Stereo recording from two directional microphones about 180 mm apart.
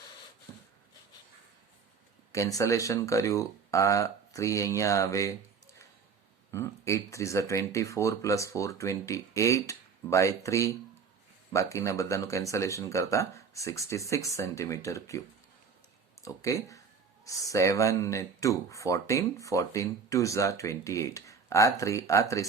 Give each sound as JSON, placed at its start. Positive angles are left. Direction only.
{"t": 2.3, "sound": "speech", "side_deg": 15}
{"t": 6.5, "sound": "speech", "side_deg": 15}
{"t": 16.2, "sound": "speech", "side_deg": 20}